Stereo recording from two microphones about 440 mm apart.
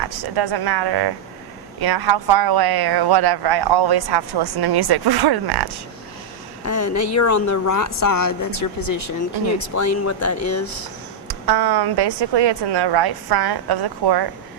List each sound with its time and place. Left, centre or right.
0.0 s speech: right
6.7 s speech: left
11.3 s speech: right